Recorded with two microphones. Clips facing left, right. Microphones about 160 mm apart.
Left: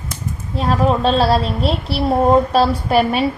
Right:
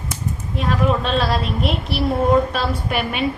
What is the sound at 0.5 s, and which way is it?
A woman's voice, 35° left (ahead or behind).